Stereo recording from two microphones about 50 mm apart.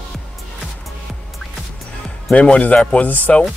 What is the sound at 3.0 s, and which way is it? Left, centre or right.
Speech, left.